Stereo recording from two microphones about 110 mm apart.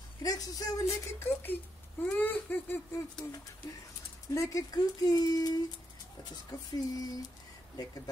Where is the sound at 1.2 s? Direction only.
20° left (ahead or behind).